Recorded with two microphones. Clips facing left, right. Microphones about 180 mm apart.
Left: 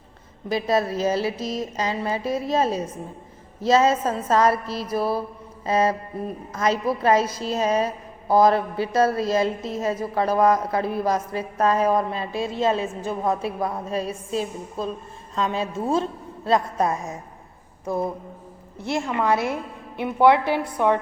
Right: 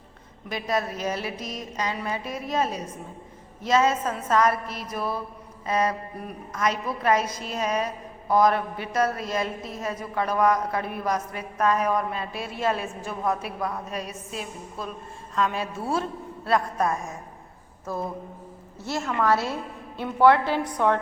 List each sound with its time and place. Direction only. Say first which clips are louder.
0.4 s a woman's voice: left 5 dB; 30° left (ahead or behind)
18.9 s a woman's voice: left 2 dB; 15° left (ahead or behind)